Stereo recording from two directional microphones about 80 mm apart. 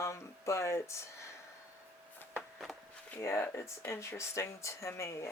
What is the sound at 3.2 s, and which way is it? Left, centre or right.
Speech, left.